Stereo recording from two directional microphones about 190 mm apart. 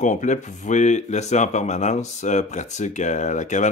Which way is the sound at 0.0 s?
40° left (ahead or behind).